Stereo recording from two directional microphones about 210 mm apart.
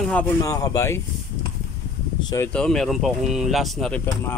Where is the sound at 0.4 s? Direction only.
15° left (ahead or behind).